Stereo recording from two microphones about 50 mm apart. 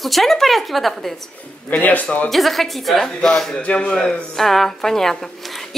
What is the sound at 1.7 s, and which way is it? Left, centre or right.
Speech, left.